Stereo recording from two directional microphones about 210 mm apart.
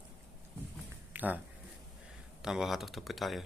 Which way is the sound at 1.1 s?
10° right (ahead or behind).